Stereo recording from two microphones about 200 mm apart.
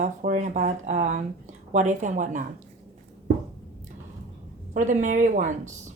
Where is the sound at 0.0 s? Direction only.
35° right (ahead or behind).